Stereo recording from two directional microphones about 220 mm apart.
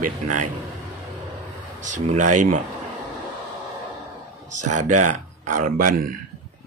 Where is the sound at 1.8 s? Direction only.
35° right (ahead or behind).